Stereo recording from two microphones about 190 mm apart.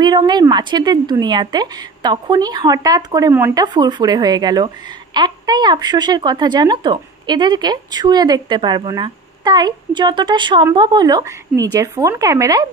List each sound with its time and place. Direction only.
0.0 s speech: 20° right (ahead or behind)